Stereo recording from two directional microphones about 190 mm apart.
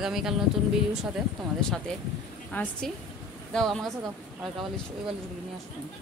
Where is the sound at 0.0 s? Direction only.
Centre (ahead or behind).